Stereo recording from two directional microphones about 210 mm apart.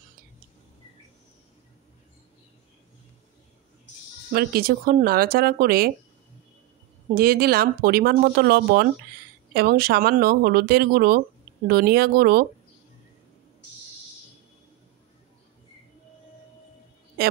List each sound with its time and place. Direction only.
4.3 s speech: 45° right (ahead or behind)
7.2 s speech: 45° right (ahead or behind)